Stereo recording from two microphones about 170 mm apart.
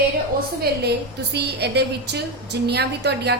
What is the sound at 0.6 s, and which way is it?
A woman's voice, 75° right (ahead or behind).